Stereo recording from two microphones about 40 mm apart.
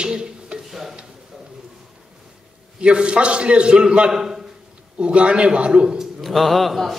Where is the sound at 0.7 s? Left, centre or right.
Centre.